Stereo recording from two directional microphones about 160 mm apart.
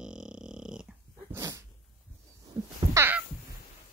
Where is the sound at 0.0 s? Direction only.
5° right (ahead or behind).